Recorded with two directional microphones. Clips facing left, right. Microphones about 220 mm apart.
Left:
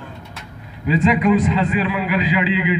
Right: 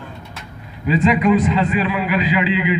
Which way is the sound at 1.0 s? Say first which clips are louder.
Right 1 dB; 35° left (ahead or behind).